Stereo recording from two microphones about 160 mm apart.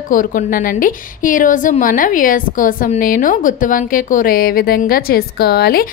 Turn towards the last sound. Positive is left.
turn(degrees=75)  # may be behind; listen again after turning